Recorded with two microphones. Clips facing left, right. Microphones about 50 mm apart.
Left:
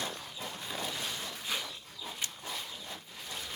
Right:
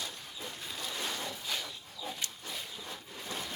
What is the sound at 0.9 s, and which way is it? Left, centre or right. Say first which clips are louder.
Boat: right 1 dB; right.